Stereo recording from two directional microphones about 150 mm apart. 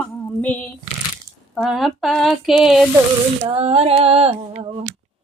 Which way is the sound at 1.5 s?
Centre (ahead or behind).